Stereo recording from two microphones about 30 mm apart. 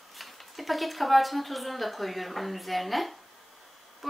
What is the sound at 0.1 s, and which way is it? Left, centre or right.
A woman's voice, centre.